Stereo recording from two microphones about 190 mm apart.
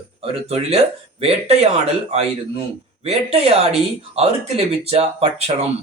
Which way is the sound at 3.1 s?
30° right (ahead or behind).